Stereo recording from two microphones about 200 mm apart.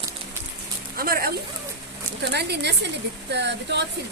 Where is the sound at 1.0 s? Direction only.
50° right (ahead or behind).